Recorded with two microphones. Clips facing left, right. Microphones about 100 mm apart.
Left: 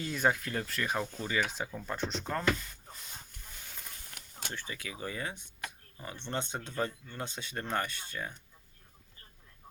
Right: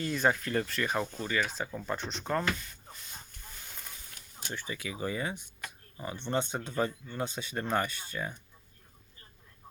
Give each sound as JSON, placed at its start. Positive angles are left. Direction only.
{"t": 0.0, "sound": "speech", "side_deg": 5}
{"t": 1.2, "sound": "speech", "side_deg": 15}
{"t": 1.7, "sound": "speech", "side_deg": 0}
{"t": 4.1, "sound": "a sound", "side_deg": 65}
{"t": 4.5, "sound": "speech", "side_deg": -10}